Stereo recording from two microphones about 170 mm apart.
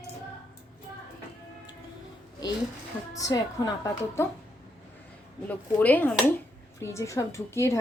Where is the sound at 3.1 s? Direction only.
20° left (ahead or behind).